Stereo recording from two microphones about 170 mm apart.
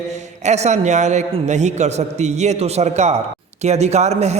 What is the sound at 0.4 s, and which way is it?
A man's voice, 40° right (ahead or behind).